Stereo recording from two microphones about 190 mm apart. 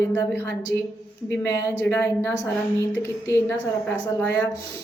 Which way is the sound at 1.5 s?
10° left (ahead or behind).